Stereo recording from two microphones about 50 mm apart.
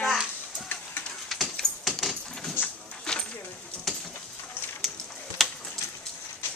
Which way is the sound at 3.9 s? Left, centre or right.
Centre.